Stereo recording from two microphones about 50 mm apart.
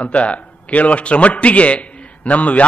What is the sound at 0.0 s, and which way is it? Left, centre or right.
A man's voice, left.